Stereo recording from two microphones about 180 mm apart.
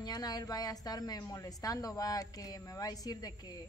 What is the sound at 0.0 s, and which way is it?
A woman's voice, 20° left (ahead or behind).